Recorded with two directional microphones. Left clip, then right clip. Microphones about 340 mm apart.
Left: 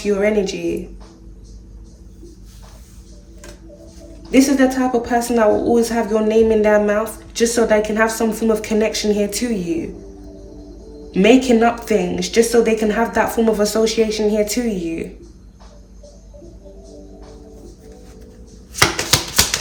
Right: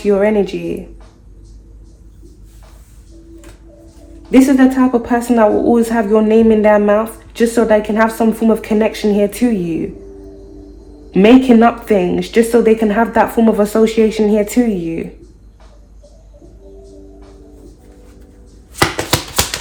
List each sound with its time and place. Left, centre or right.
0.0 s speech: centre
4.3 s speech: centre
11.1 s speech: centre
18.7 s a sound: centre